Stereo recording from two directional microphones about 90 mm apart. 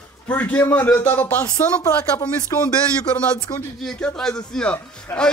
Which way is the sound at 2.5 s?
40° left (ahead or behind).